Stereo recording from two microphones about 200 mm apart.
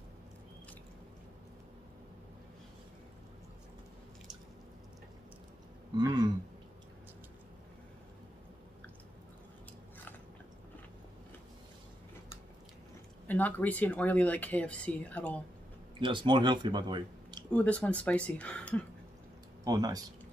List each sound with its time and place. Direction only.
5.9 s throat clearing: 20° right (ahead or behind)
13.3 s speech: 10° left (ahead or behind)
16.0 s speech: 25° right (ahead or behind)
17.5 s speech: 5° left (ahead or behind)
19.6 s speech: 20° right (ahead or behind)